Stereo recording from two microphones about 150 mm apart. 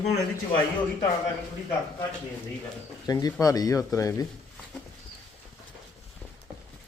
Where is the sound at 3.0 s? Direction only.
25° left (ahead or behind).